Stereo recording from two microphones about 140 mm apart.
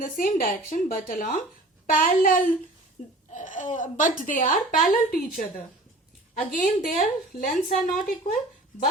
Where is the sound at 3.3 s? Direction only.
65° left (ahead or behind).